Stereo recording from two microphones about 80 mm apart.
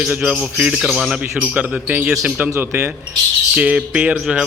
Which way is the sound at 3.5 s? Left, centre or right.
Centre.